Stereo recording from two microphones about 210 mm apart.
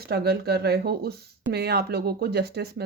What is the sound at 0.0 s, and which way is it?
Speech, 50° right (ahead or behind).